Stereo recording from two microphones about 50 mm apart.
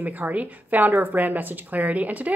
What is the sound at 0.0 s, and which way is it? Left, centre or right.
A woman's voice, right.